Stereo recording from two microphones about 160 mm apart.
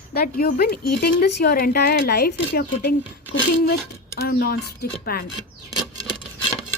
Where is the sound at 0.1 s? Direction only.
70° left (ahead or behind).